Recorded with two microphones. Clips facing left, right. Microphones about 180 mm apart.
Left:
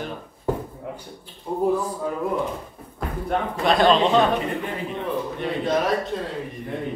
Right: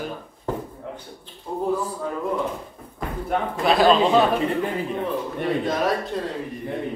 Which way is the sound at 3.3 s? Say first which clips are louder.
Even; centre (ahead or behind).